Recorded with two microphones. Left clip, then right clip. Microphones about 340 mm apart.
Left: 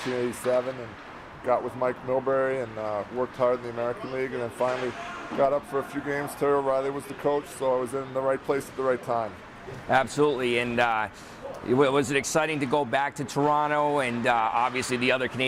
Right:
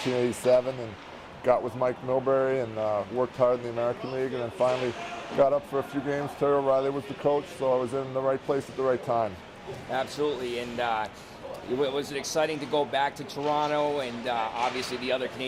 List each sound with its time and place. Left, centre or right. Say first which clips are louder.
1.5 s speech: right 1 dB; right
9.9 s speech: left 6 dB; left